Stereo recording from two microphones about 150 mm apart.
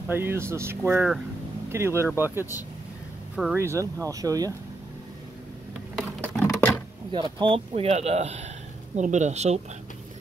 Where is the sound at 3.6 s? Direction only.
20° right (ahead or behind).